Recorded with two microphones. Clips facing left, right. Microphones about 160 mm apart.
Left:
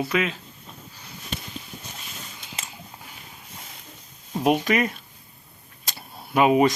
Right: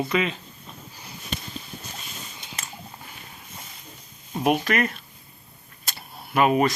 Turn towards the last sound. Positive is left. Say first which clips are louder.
# left 2 dB
turn(degrees=10)  # may be behind; listen again after turning